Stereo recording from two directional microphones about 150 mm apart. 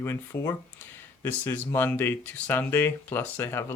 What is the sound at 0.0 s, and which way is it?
Speech, 20° left (ahead or behind).